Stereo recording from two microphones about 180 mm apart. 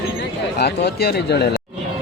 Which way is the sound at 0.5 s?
70° left (ahead or behind).